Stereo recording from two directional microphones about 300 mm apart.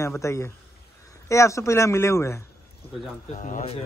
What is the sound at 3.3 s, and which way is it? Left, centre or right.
Speech, left.